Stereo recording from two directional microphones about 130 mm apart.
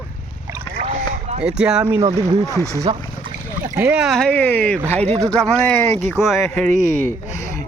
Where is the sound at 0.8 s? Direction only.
55° right (ahead or behind).